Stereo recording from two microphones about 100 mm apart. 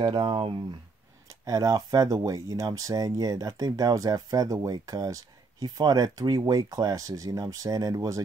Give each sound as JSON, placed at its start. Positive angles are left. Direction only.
{"t": 0.0, "sound": "speech", "side_deg": -60}
{"t": 1.4, "sound": "speech", "side_deg": -40}